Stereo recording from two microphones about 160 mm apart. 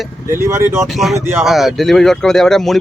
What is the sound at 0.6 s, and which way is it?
Speech, 15° right (ahead or behind).